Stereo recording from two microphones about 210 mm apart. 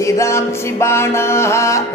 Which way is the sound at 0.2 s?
15° left (ahead or behind).